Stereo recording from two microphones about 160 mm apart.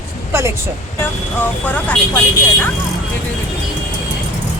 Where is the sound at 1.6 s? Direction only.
10° left (ahead or behind).